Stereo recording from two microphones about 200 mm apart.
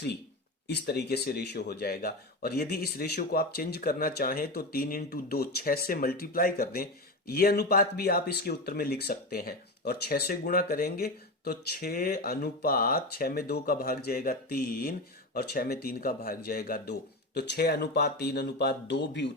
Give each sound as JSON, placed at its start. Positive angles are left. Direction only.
{"t": 0.7, "sound": "speech", "side_deg": 55}